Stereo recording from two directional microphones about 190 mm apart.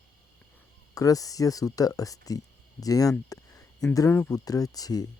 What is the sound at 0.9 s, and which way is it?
Speech, 20° left (ahead or behind).